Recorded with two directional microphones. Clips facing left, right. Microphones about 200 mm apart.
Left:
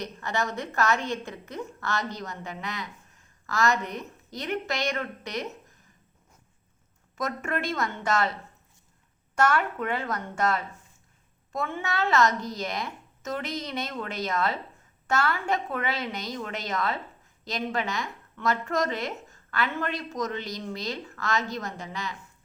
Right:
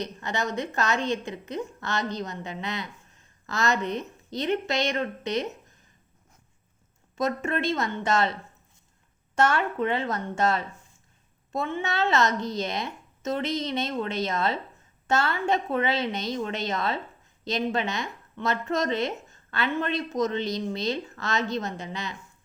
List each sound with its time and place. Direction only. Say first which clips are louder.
0.0 s speech: even; 20° right (ahead or behind)
7.2 s speech: right 4 dB; 25° right (ahead or behind)
9.3 s speech: right 1 dB; 25° right (ahead or behind)